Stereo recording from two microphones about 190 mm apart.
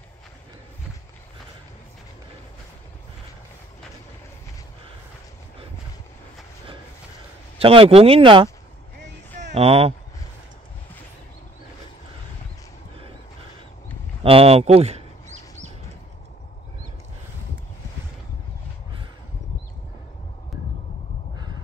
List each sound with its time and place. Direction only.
7.5 s speech: 30° right (ahead or behind)
14.2 s bird: 30° right (ahead or behind)